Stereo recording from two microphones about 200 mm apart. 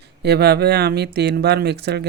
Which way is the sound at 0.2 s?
55° right (ahead or behind).